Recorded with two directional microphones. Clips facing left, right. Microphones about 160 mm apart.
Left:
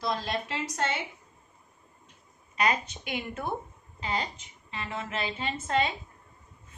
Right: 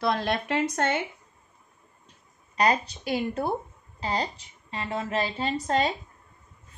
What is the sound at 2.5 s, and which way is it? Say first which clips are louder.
A woman's voice: right 4 dB; 35° right (ahead or behind).